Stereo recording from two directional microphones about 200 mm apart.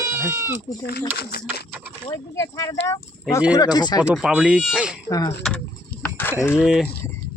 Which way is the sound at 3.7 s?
20° left (ahead or behind).